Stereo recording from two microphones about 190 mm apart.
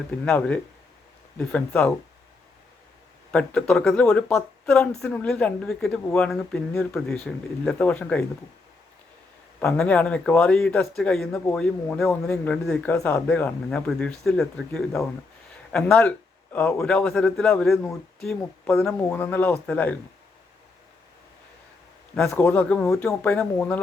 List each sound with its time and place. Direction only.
0.3 s speech: 5° left (ahead or behind)
3.3 s speech: 5° left (ahead or behind)
9.6 s speech: 5° left (ahead or behind)
22.3 s speech: 10° left (ahead or behind)